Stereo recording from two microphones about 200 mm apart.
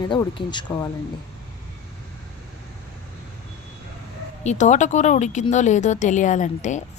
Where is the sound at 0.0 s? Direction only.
20° left (ahead or behind).